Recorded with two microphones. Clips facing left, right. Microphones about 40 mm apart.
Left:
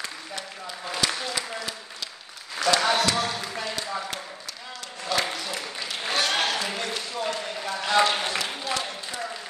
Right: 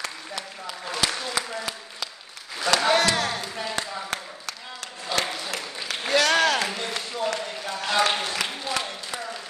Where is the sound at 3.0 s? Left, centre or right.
Right.